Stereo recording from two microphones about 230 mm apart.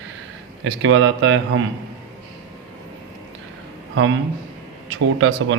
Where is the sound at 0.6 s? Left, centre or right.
Right.